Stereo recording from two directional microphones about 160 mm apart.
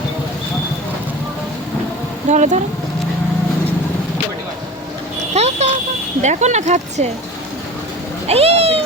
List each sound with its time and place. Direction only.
2.3 s speech: 50° right (ahead or behind)
5.3 s a sound: 45° right (ahead or behind)
6.2 s speech: 45° right (ahead or behind)
8.3 s cat: 40° right (ahead or behind)